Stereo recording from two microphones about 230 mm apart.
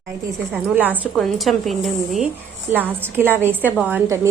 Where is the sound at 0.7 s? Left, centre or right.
Centre.